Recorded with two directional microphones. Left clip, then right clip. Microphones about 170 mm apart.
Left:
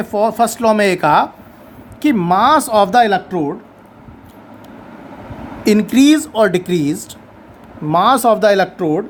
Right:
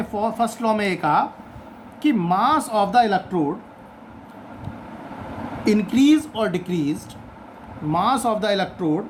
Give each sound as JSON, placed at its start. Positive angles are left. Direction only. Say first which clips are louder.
{"t": 0.0, "sound": "speech", "louder": "left 8 dB", "side_deg": 40}
{"t": 5.6, "sound": "speech", "louder": "left 6 dB", "side_deg": 45}